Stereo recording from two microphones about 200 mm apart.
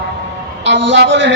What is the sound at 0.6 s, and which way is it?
Speech, 65° right (ahead or behind).